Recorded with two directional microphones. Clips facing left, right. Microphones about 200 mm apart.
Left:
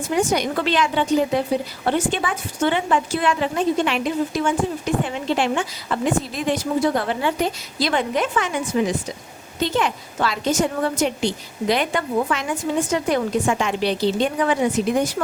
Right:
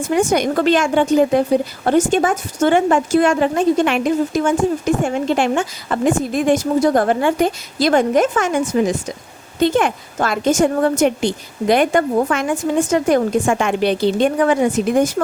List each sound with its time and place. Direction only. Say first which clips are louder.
0.1 s a woman's voice: right 4 dB; 50° right (ahead or behind)